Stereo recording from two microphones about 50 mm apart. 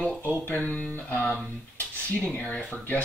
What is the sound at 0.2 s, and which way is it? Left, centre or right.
Speech, left.